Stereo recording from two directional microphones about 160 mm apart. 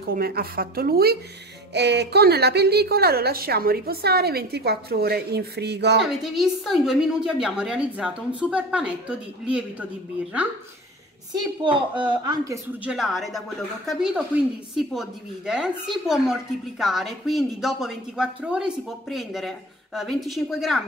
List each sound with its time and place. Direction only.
0.1 s a woman's voice: 70° right (ahead or behind)
1.7 s a woman's voice: 90° right
6.0 s speech: 5° right (ahead or behind)
11.6 s speech: 30° right (ahead or behind)
12.8 s speech: 5° right (ahead or behind)